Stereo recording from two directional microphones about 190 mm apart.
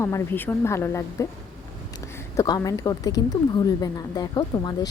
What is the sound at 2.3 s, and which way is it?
Speech, 15° left (ahead or behind).